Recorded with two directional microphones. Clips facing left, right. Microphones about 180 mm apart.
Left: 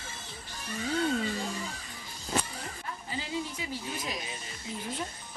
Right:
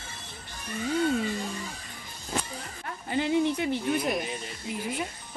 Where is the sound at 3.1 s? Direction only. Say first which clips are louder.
Right 11 dB; 65° right (ahead or behind).